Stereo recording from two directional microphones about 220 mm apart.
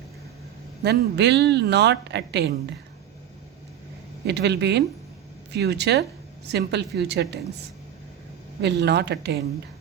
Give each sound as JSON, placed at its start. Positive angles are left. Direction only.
{"t": 0.8, "sound": "a woman's voice", "side_deg": -50}
{"t": 4.3, "sound": "a woman's voice", "side_deg": -50}
{"t": 8.6, "sound": "a woman's voice", "side_deg": -50}